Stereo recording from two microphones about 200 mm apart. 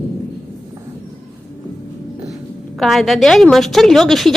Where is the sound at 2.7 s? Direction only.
Centre (ahead or behind).